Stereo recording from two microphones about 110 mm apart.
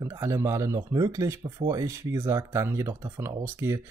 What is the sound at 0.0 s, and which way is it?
Speech, 25° right (ahead or behind).